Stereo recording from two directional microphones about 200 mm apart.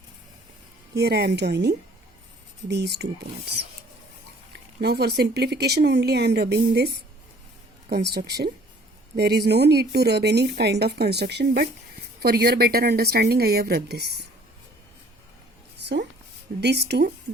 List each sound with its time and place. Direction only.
0.9 s speech: 55° right (ahead or behind)
4.5 s speech: 55° right (ahead or behind)
15.8 s a sound: 55° right (ahead or behind)
16.6 s speech: 55° right (ahead or behind)